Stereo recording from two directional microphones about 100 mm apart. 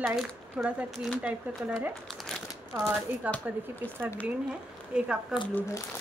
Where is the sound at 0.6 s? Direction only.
10° right (ahead or behind).